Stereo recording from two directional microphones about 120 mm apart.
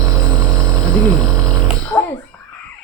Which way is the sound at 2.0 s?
15° left (ahead or behind).